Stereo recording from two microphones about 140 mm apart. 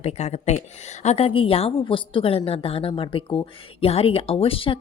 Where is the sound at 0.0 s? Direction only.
50° left (ahead or behind).